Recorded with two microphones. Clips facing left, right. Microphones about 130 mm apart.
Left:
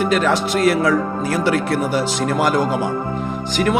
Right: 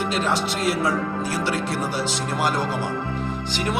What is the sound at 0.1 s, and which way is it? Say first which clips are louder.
Speech: left 6 dB; 60° left (ahead or behind).